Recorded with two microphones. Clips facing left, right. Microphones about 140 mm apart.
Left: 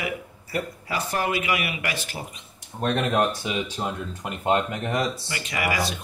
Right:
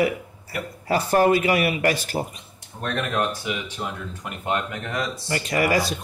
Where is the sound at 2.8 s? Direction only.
25° left (ahead or behind).